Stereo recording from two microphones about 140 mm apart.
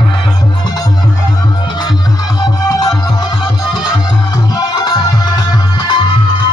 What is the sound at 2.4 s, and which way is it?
Music, 25° left (ahead or behind).